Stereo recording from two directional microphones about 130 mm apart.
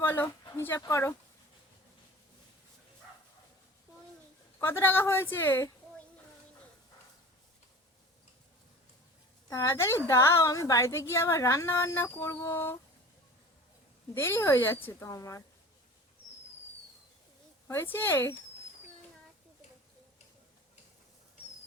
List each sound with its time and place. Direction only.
0.0 s a sound: 15° left (ahead or behind)
0.8 s a woman's voice: 20° left (ahead or behind)
4.6 s a woman's voice: 15° left (ahead or behind)
9.5 s a woman's voice: 20° left (ahead or behind)
14.1 s a woman's voice: 15° left (ahead or behind)
17.7 s a woman's voice: 15° left (ahead or behind)